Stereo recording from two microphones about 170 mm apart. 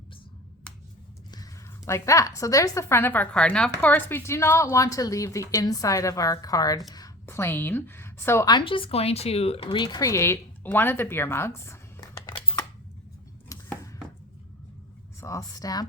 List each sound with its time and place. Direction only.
1.3 s a woman's voice: 20° left (ahead or behind)
13.5 s chopping: 20° left (ahead or behind)
15.2 s a woman's voice: 20° left (ahead or behind)